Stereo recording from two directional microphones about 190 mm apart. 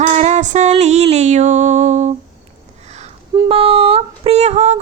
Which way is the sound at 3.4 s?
30° right (ahead or behind).